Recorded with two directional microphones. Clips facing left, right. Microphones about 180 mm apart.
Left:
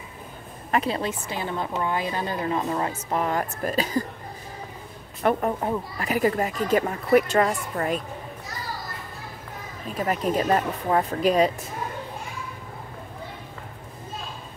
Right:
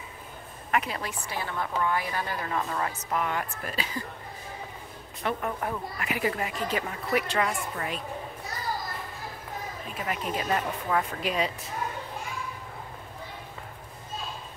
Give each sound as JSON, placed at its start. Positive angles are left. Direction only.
{"t": 0.7, "sound": "a woman's voice", "side_deg": 30}
{"t": 5.2, "sound": "a woman's voice", "side_deg": 50}
{"t": 5.6, "sound": "a woman's voice", "side_deg": 25}
{"t": 6.0, "sound": "a woman's voice", "side_deg": 40}
{"t": 9.9, "sound": "speech", "side_deg": 40}